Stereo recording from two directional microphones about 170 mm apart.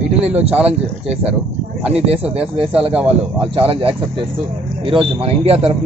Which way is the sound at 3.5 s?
35° right (ahead or behind).